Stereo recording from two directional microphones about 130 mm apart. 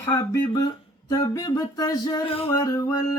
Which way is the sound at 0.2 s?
25° left (ahead or behind).